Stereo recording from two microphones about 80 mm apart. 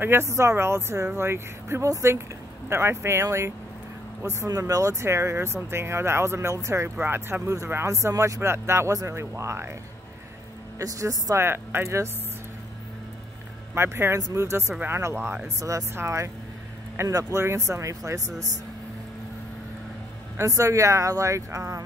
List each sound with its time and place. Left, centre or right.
0.0 s speech: right
10.8 s a woman's voice: right
11.3 s speech: right
13.7 s speech: right
15.4 s a woman's voice: right
20.3 s speech: right